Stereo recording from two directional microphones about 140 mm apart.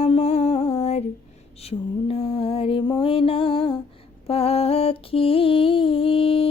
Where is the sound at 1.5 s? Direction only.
45° left (ahead or behind).